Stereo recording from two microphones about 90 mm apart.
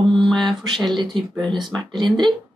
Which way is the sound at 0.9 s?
60° right (ahead or behind).